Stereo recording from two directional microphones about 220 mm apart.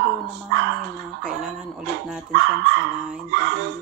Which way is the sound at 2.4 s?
55° right (ahead or behind).